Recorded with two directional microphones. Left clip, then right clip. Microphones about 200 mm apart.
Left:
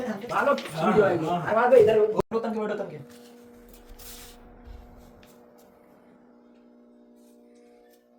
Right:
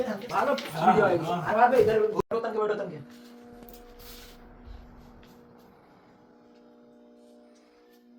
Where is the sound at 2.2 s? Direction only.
Centre (ahead or behind).